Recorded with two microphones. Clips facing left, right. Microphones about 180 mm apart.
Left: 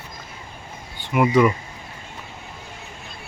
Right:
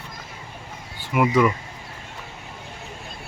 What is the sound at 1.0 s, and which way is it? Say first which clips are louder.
Speech: left 2 dB; centre (ahead or behind).